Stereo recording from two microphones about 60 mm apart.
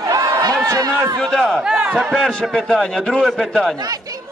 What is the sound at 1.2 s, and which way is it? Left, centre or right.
A man's voice, centre.